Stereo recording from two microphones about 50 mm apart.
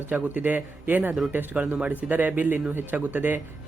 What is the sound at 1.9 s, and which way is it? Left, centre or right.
Speech, right.